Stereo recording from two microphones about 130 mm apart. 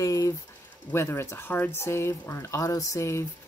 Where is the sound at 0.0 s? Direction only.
25° left (ahead or behind).